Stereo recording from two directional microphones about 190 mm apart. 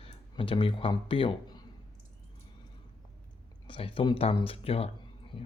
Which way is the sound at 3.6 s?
25° left (ahead or behind).